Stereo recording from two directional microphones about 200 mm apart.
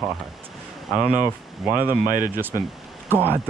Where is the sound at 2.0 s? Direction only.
40° right (ahead or behind).